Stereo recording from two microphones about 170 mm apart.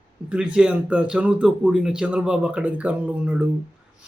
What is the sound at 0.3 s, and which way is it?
Speech, 5° right (ahead or behind).